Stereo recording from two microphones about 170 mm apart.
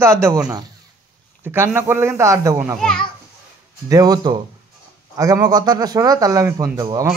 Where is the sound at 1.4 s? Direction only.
15° right (ahead or behind).